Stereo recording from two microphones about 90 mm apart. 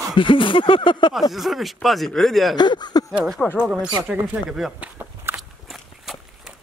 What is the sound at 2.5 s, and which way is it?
Speech, 55° left (ahead or behind).